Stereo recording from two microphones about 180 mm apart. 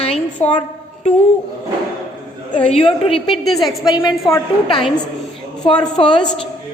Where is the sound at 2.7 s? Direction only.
35° left (ahead or behind).